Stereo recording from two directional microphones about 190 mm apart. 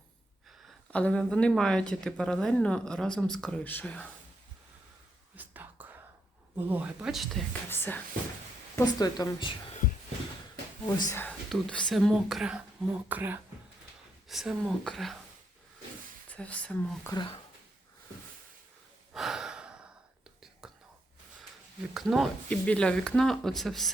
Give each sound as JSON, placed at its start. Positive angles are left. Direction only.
{"t": 0.9, "sound": "speech", "side_deg": 5}
{"t": 5.4, "sound": "whispering", "side_deg": -10}
{"t": 6.6, "sound": "speech", "side_deg": -10}
{"t": 7.7, "sound": "speech", "side_deg": 10}
{"t": 10.8, "sound": "speech", "side_deg": 15}
{"t": 16.3, "sound": "speech", "side_deg": 5}
{"t": 17.1, "sound": "speech", "side_deg": 25}
{"t": 19.1, "sound": "breathing", "side_deg": 0}
{"t": 20.6, "sound": "whispering", "side_deg": -5}
{"t": 21.9, "sound": "speech", "side_deg": 0}